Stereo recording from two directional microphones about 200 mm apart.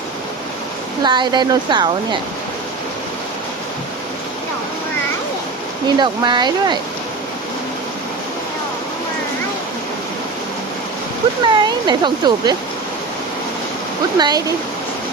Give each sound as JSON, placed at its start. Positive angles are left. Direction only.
{"t": 1.0, "sound": "speech", "side_deg": -20}
{"t": 6.0, "sound": "speech", "side_deg": -20}
{"t": 11.4, "sound": "speech", "side_deg": -20}
{"t": 14.2, "sound": "speech", "side_deg": -20}